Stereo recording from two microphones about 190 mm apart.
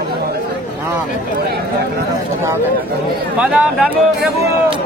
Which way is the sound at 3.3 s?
5° right (ahead or behind).